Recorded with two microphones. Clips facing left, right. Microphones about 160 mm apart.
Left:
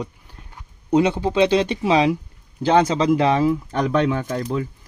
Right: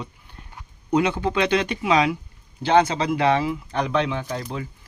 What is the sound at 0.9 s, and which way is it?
Speech, 25° left (ahead or behind).